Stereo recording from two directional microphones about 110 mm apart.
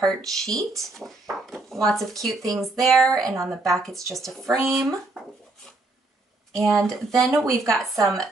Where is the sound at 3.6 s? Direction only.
5° left (ahead or behind).